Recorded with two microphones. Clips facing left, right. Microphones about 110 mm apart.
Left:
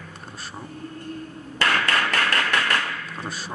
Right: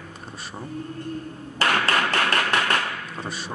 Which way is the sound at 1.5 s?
25° right (ahead or behind).